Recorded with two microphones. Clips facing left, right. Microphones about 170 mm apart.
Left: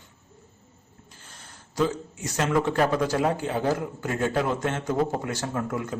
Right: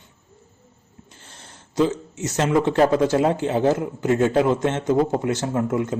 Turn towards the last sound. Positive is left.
turn(degrees=-20)  # may be behind; listen again after turning